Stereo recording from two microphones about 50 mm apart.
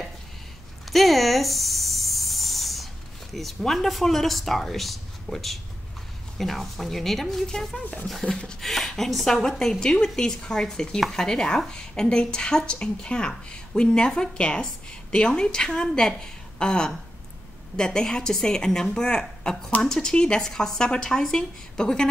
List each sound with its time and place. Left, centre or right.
0.9 s hiss: centre
3.3 s a woman's voice: centre